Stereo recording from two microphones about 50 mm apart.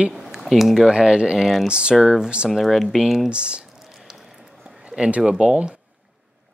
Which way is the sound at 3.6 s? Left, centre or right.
Centre.